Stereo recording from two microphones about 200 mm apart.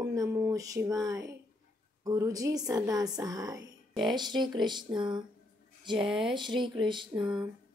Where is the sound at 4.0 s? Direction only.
20° right (ahead or behind).